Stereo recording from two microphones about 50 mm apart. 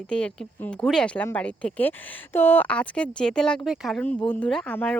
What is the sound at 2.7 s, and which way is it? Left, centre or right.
Speech, left.